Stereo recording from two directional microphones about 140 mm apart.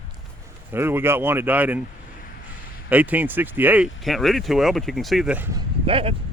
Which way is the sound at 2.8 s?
10° right (ahead or behind).